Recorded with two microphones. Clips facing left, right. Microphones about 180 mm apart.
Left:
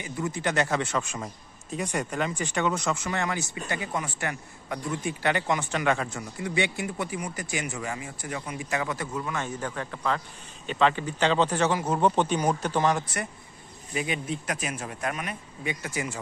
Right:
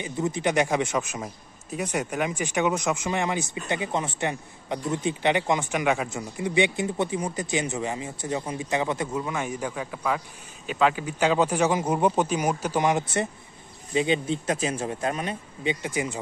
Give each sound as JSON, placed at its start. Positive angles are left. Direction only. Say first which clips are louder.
{"t": 0.0, "sound": "a man's voice", "louder": "right 4 dB", "side_deg": -20}
{"t": 6.0, "sound": "a man's voice", "louder": "right 3 dB", "side_deg": -20}